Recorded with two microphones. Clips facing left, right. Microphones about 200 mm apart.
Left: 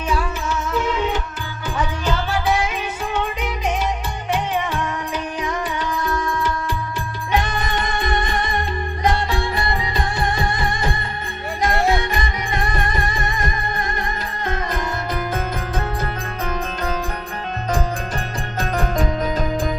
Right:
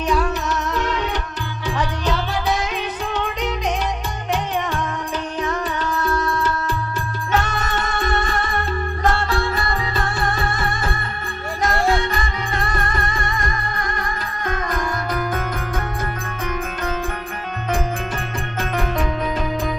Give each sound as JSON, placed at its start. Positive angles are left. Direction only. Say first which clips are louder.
{"t": 0.1, "sound": "music", "louder": "right 2 dB", "side_deg": 5}
{"t": 5.4, "sound": "music", "louder": "right 3 dB", "side_deg": 10}
{"t": 16.4, "sound": "music", "louder": "even", "side_deg": 35}
{"t": 18.6, "sound": "music", "louder": "left 1 dB", "side_deg": 40}